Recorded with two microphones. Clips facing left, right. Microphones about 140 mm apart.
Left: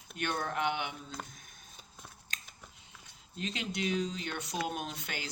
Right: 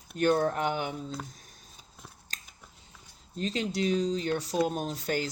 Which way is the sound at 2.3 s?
35° right (ahead or behind).